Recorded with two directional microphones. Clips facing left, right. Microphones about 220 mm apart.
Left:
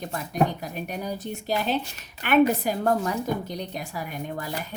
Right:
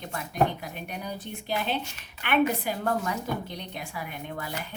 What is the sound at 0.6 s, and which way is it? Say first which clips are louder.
A woman's voice: left 5 dB; 40° left (ahead or behind).